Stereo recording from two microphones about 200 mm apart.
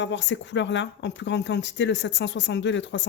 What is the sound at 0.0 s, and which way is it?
A woman's voice, 65° left (ahead or behind).